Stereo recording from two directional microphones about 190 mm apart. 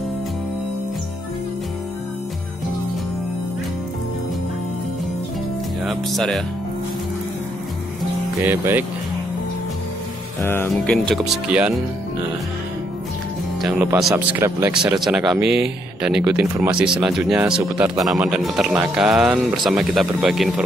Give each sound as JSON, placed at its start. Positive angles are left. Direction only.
{"t": 5.9, "sound": "speech", "side_deg": 0}
{"t": 8.5, "sound": "speech", "side_deg": -10}
{"t": 10.4, "sound": "speech", "side_deg": 10}
{"t": 13.6, "sound": "speech", "side_deg": 0}
{"t": 14.1, "sound": "speech", "side_deg": -15}